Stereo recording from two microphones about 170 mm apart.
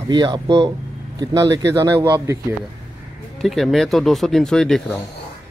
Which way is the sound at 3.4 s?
Centre (ahead or behind).